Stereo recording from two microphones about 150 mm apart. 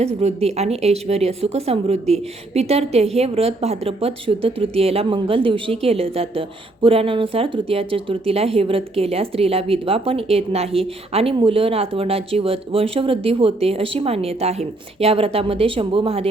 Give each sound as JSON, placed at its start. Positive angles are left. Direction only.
{"t": 0.0, "sound": "speech", "side_deg": -45}